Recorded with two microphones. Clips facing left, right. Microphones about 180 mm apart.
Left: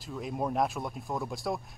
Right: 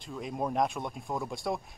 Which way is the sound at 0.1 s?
Centre (ahead or behind).